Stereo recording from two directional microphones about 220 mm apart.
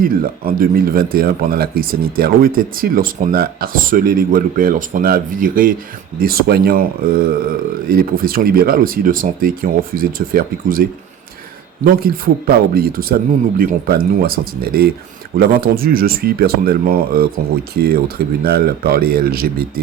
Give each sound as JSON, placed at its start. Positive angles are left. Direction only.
{"t": 0.0, "sound": "speech", "side_deg": -40}
{"t": 11.9, "sound": "speech", "side_deg": -40}